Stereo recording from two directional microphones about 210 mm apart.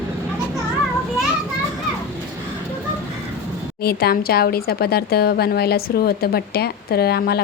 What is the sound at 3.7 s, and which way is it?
Speech, 45° left (ahead or behind).